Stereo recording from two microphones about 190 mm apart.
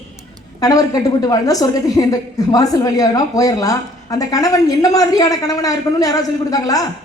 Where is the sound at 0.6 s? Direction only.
20° left (ahead or behind).